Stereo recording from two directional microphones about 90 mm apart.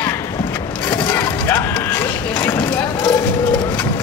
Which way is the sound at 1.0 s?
25° left (ahead or behind).